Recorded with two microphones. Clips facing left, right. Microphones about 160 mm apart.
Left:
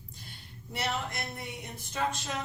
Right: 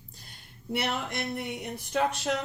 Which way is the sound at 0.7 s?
65° right (ahead or behind).